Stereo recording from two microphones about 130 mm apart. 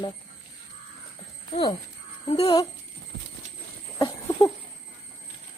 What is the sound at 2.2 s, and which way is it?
Speech, 50° left (ahead or behind).